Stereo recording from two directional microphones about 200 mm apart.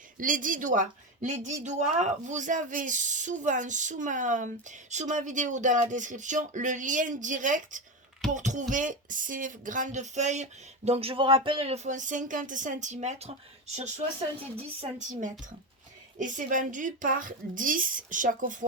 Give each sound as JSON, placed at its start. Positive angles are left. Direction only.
{"t": 0.2, "sound": "speech", "side_deg": -40}